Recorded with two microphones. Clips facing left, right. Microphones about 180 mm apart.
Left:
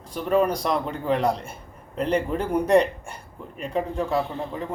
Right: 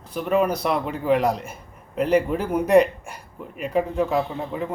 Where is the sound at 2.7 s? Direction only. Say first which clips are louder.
Right 3 dB; 30° left (ahead or behind).